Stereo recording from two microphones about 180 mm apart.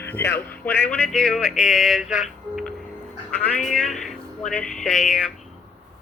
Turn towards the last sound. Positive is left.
turn(degrees=5)  # may be behind; listen again after turning